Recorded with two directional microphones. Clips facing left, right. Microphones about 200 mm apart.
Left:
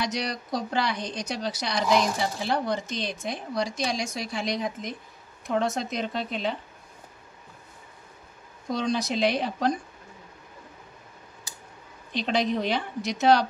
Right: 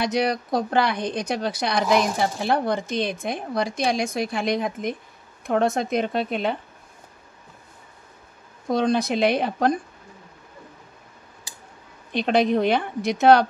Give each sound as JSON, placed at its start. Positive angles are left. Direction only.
{"t": 0.0, "sound": "a woman's voice", "side_deg": -55}
{"t": 8.6, "sound": "a woman's voice", "side_deg": -55}
{"t": 12.1, "sound": "a woman's voice", "side_deg": -55}